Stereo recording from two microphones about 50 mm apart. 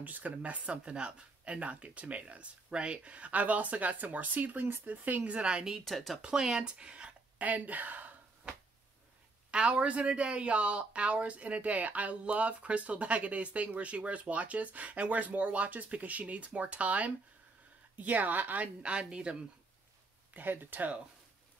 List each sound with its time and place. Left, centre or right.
0.0 s speech: right; by 5.8 s centre
5.9 s speech: centre
6.2 s speech: centre
7.4 s speech: right
9.5 s speech: right
18.8 s speech: right
20.3 s speech: right